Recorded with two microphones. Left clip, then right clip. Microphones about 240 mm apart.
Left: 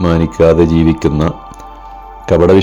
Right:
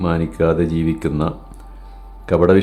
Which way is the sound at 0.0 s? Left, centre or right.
Left.